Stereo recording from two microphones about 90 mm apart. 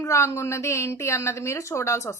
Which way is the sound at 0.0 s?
30° left (ahead or behind).